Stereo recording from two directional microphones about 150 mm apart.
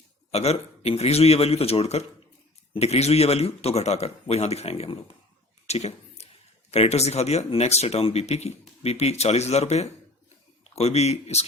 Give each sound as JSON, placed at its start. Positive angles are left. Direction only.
{"t": 0.3, "sound": "speech", "side_deg": 45}
{"t": 5.6, "sound": "a sound", "side_deg": 45}
{"t": 6.7, "sound": "speech", "side_deg": 45}